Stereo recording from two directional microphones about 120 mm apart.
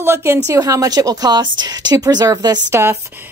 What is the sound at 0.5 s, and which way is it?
Speech, 30° right (ahead or behind).